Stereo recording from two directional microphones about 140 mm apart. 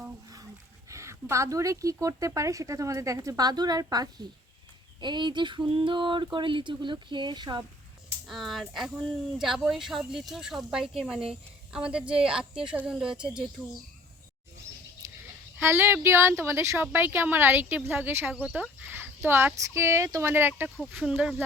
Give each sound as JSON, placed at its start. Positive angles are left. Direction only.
{"t": 0.9, "sound": "speech", "side_deg": -20}
{"t": 4.9, "sound": "a sound", "side_deg": -35}
{"t": 8.3, "sound": "speech", "side_deg": 0}
{"t": 15.5, "sound": "speech", "side_deg": -20}
{"t": 20.7, "sound": "speech", "side_deg": 0}